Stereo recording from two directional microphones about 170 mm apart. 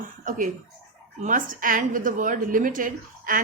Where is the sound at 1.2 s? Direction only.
50° right (ahead or behind).